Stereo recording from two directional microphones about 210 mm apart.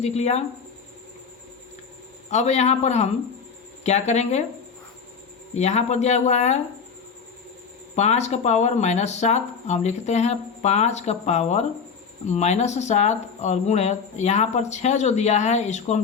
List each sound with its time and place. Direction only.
0.0 s speech: 30° left (ahead or behind)
2.3 s speech: 30° left (ahead or behind)
5.5 s speech: 30° left (ahead or behind)
7.9 s speech: 30° left (ahead or behind)